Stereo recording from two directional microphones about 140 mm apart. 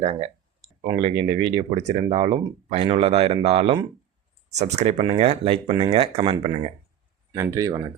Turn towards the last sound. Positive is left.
turn(degrees=-25)  # may be behind; listen again after turning